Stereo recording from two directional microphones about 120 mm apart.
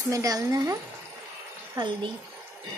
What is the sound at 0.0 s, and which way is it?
Speech, 25° right (ahead or behind).